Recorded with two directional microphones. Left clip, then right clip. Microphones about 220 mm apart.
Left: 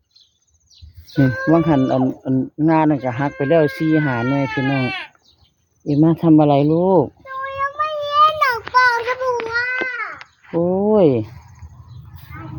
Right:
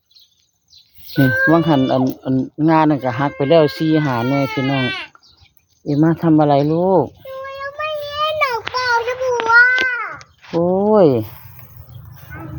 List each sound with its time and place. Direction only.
1.1 s speech: 10° right (ahead or behind)
5.8 s speech: 10° left (ahead or behind)
7.8 s child singing: 25° left (ahead or behind)
8.6 s a sound: 5° right (ahead or behind)